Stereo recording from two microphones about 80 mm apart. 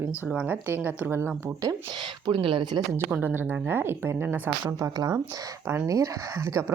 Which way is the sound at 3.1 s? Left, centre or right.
Centre.